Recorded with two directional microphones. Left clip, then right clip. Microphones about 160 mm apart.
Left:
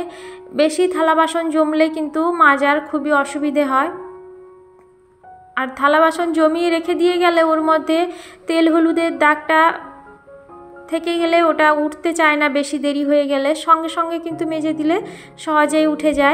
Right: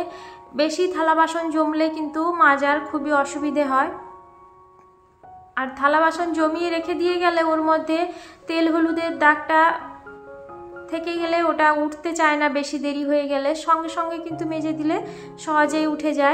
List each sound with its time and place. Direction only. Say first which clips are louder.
0.0 s a woman's voice: left 2 dB; 25° left (ahead or behind)
5.5 s a woman's voice: left 4 dB; 25° left (ahead or behind)
10.9 s a woman's voice: left 6 dB; 25° left (ahead or behind)